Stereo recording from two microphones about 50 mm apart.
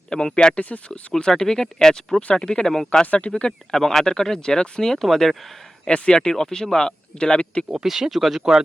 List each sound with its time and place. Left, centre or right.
0.1 s speech: centre
0.6 s speech: left
1.1 s speech: centre
3.1 s speech: left
3.7 s speech: centre
5.8 s speech: centre
7.9 s speech: centre